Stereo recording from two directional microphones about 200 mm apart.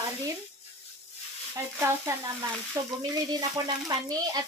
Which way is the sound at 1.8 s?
15° right (ahead or behind).